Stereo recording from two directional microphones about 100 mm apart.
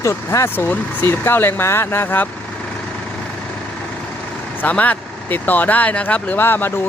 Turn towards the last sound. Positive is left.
turn(degrees=20)  # may be behind; listen again after turning